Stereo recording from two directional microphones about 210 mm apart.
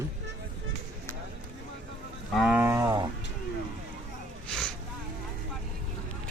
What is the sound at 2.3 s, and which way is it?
Cattle, centre (ahead or behind).